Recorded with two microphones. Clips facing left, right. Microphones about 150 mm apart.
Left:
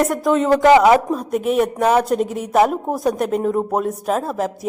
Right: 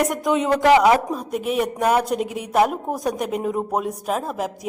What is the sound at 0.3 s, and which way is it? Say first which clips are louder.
Speech: left 4 dB; 15° right (ahead or behind).